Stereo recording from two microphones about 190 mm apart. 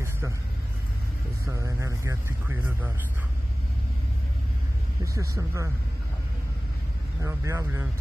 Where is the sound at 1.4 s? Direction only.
15° right (ahead or behind).